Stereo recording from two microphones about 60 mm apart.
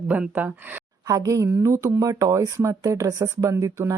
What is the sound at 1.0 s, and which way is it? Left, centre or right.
Speech, right.